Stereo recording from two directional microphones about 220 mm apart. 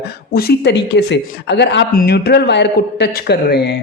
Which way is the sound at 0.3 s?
45° left (ahead or behind).